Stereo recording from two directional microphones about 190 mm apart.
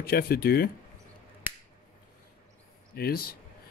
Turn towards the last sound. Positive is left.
turn(degrees=55)  # may be behind; listen again after turning